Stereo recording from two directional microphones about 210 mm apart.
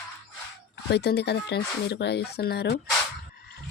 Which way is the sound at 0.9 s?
50° left (ahead or behind).